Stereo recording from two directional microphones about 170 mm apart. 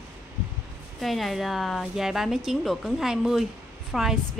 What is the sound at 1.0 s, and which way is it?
Speech, centre (ahead or behind).